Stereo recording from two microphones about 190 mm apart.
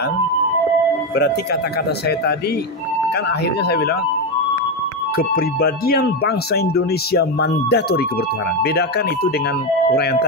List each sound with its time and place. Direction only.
1.1 s speech: 60° left (ahead or behind)
3.3 s speech: 60° left (ahead or behind)
5.1 s speech: 50° left (ahead or behind)